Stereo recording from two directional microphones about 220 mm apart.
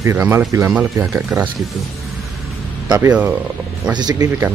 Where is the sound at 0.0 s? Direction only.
10° right (ahead or behind).